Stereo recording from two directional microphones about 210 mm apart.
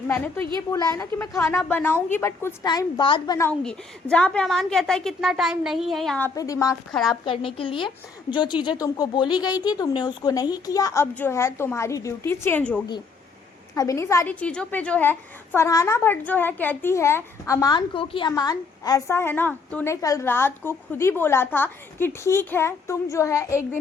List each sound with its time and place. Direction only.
0.7 s a woman's voice: 15° left (ahead or behind)
3.6 s a woman's voice: 5° left (ahead or behind)
6.9 s a woman's voice: centre (ahead or behind)
7.3 s a woman's voice: 25° left (ahead or behind)